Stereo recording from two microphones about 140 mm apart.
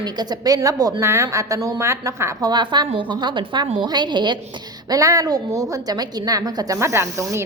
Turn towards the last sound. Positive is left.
turn(degrees=-20)  # may be behind; listen again after turning